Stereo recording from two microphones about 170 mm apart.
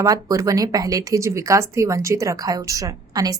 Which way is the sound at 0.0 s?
20° right (ahead or behind).